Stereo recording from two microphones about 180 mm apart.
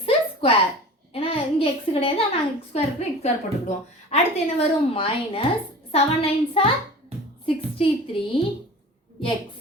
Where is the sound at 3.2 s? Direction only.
35° left (ahead or behind).